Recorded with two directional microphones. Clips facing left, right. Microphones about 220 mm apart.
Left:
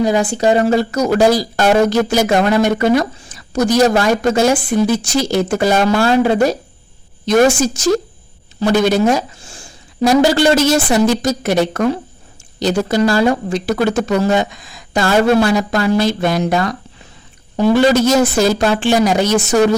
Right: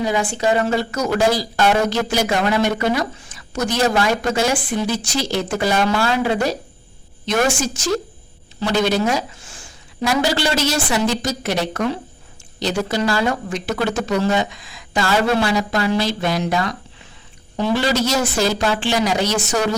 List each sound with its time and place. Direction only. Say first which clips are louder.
0.0 s a woman's voice: left 6 dB; 40° left (ahead or behind)
9.5 s a sound: left 3 dB; 30° left (ahead or behind)
10.2 s speech: left 8 dB; 50° left (ahead or behind)